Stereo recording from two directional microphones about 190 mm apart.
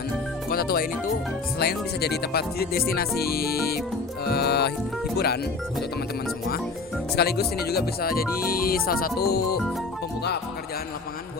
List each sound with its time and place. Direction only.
0.5 s speech: 55° left (ahead or behind)
4.3 s music: 55° left (ahead or behind)
7.2 s speech: 55° left (ahead or behind)